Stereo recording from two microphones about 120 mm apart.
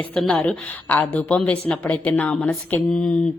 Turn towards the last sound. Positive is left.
turn(degrees=10)  # may be behind; listen again after turning